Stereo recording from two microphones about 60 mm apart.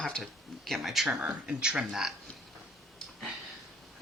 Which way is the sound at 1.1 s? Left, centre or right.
Centre.